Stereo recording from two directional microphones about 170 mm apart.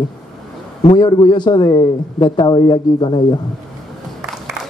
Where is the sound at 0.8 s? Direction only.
25° left (ahead or behind).